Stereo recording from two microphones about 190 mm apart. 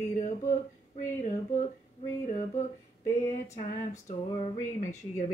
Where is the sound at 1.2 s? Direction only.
40° left (ahead or behind).